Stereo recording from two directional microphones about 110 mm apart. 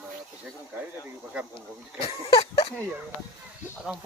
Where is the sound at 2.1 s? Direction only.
55° left (ahead or behind).